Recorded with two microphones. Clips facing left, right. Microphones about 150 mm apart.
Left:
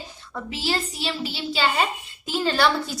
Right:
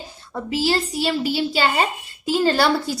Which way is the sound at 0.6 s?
35° right (ahead or behind).